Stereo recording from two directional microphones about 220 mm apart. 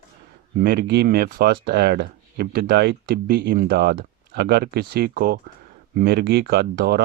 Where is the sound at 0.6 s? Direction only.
45° right (ahead or behind).